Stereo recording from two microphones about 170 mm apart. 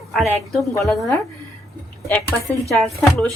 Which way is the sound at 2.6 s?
Centre (ahead or behind).